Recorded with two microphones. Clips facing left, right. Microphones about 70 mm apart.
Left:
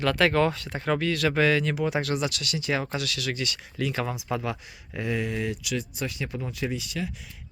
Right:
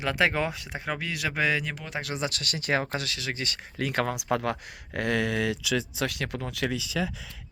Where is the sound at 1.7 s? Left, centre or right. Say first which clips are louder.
Left 9 dB; centre.